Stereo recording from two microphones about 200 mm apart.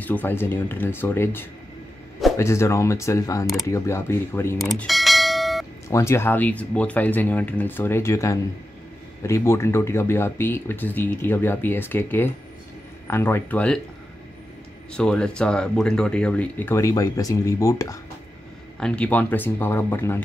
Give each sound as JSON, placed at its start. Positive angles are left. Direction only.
{"t": 0.0, "sound": "speech", "side_deg": 10}
{"t": 4.6, "sound": "bell", "side_deg": 0}
{"t": 5.9, "sound": "speech", "side_deg": 15}
{"t": 14.9, "sound": "speech", "side_deg": 5}
{"t": 18.8, "sound": "speech", "side_deg": 5}